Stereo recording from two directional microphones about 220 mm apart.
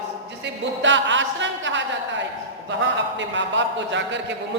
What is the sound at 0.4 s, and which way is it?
A man's voice, 55° right (ahead or behind).